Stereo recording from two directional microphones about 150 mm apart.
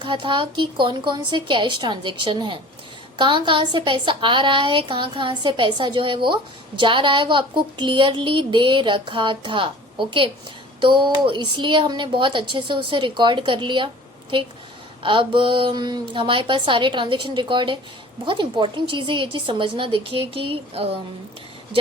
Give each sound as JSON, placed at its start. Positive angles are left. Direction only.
{"t": 0.0, "sound": "a woman's voice", "side_deg": -30}